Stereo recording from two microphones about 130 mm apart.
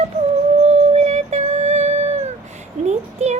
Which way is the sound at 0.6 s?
55° right (ahead or behind).